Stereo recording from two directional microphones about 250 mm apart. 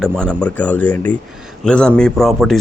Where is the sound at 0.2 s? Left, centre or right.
Centre.